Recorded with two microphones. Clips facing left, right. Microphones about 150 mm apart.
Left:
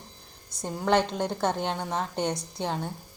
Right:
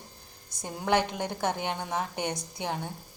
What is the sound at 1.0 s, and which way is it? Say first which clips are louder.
Speech: left 3 dB; 15° right (ahead or behind).